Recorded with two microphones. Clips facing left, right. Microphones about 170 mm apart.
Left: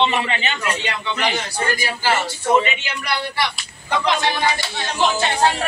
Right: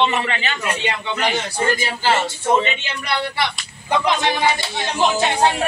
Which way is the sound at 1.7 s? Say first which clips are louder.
Right 1 dB; 25° right (ahead or behind).